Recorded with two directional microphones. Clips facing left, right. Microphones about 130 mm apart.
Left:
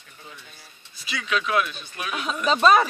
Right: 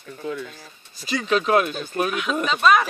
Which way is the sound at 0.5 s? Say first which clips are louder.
Right 6 dB; 45° right (ahead or behind).